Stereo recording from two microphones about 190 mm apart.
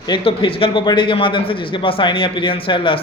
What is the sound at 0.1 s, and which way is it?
Speech, 30° left (ahead or behind).